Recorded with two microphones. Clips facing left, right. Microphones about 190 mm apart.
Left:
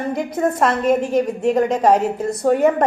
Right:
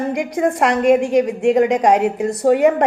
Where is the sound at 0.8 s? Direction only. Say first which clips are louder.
Right 6 dB; 85° right.